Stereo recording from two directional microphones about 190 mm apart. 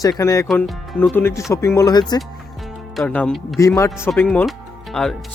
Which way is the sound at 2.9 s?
5° left (ahead or behind).